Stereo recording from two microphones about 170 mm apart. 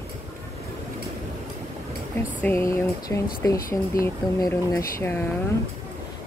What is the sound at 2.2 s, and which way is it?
Speech, 15° left (ahead or behind).